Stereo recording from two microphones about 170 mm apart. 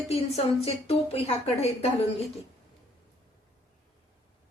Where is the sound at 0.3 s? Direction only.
35° left (ahead or behind).